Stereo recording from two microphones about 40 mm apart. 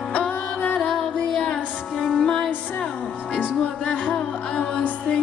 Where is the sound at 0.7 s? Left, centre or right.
Centre.